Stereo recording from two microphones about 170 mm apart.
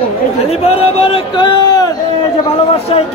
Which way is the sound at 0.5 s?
35° left (ahead or behind).